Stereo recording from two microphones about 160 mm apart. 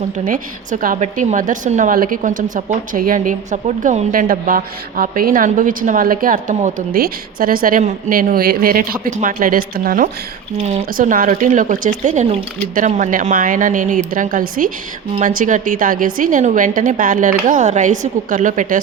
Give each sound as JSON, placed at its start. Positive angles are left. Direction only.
{"t": 0.3, "sound": "speech", "side_deg": -60}
{"t": 10.6, "sound": "speech", "side_deg": -40}
{"t": 10.9, "sound": "speech", "side_deg": -60}